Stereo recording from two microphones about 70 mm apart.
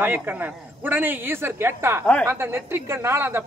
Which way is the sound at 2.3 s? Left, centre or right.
Right.